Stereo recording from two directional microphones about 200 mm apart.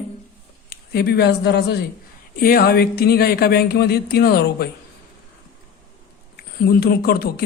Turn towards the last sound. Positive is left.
turn(degrees=50)  # may be behind; listen again after turning